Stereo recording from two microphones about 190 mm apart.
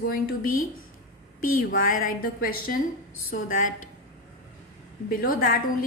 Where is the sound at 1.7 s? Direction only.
45° left (ahead or behind).